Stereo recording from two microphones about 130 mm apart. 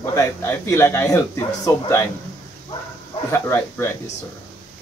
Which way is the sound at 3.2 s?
20° left (ahead or behind).